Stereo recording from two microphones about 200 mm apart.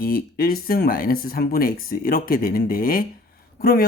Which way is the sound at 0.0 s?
45° left (ahead or behind).